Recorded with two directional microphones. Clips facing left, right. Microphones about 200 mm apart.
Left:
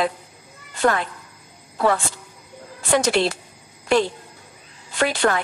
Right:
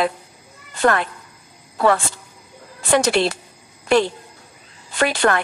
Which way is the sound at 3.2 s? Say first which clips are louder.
Right 1 dB; 70° right (ahead or behind).